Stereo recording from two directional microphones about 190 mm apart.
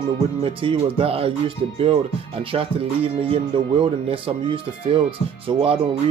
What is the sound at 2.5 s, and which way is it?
Speech, 30° right (ahead or behind).